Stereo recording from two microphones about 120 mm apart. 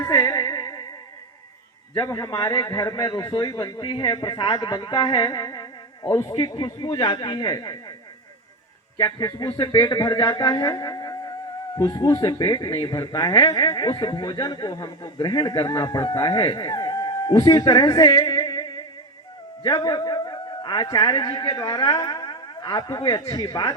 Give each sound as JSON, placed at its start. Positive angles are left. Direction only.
{"t": 0.0, "sound": "music", "side_deg": 25}
{"t": 2.0, "sound": "speech", "side_deg": 30}
{"t": 9.0, "sound": "a man's voice", "side_deg": 30}